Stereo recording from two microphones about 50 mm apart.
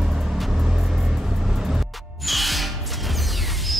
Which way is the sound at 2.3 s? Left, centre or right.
Centre.